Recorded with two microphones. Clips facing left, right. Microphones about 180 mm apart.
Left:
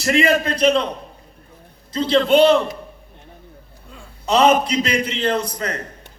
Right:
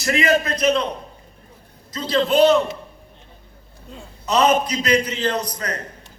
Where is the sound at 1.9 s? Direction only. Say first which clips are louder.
Left 4 dB; 30° left (ahead or behind).